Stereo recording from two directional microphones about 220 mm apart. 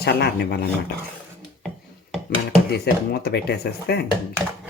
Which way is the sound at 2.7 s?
45° left (ahead or behind).